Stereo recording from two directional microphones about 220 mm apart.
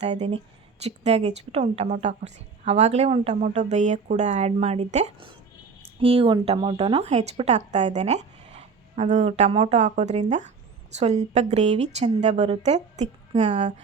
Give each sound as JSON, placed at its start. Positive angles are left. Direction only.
{"t": 0.0, "sound": "a woman's voice", "side_deg": -30}